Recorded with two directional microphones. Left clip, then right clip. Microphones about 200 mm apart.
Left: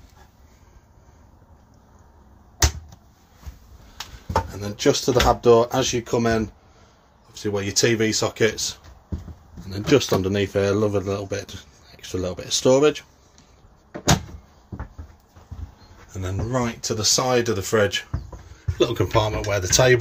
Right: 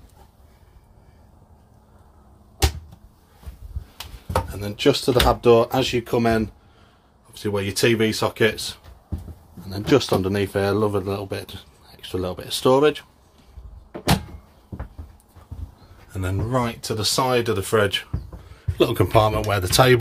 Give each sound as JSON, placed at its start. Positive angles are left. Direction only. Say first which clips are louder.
{"t": 4.5, "sound": "speech", "louder": "right 3 dB", "side_deg": -5}
{"t": 16.1, "sound": "speech", "louder": "right 2 dB", "side_deg": -20}
{"t": 18.8, "sound": "speech", "louder": "right 3 dB", "side_deg": -20}